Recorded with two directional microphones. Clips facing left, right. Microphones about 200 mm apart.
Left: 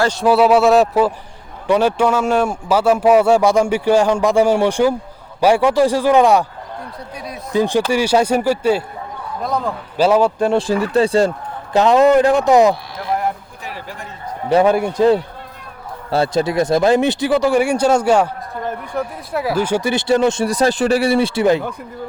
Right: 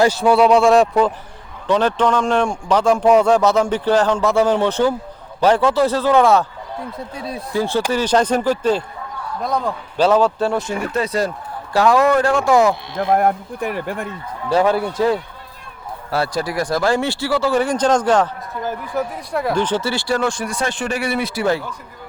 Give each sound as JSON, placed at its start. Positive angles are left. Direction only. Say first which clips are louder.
{"t": 0.1, "sound": "a man's voice", "louder": "left 1 dB", "side_deg": 0}
{"t": 7.2, "sound": "speech", "louder": "right 3 dB", "side_deg": -30}
{"t": 7.5, "sound": "speech", "louder": "left 4 dB", "side_deg": 15}
{"t": 10.5, "sound": "a man's voice", "louder": "left 5 dB", "side_deg": 35}
{"t": 13.0, "sound": "speech", "louder": "right 5 dB", "side_deg": -55}
{"t": 14.5, "sound": "speech", "louder": "left 3 dB", "side_deg": 20}
{"t": 18.6, "sound": "speech", "louder": "right 1 dB", "side_deg": 0}
{"t": 20.5, "sound": "a man's voice", "louder": "left 8 dB", "side_deg": 35}